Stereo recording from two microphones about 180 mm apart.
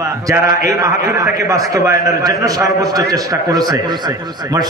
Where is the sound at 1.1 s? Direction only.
20° right (ahead or behind).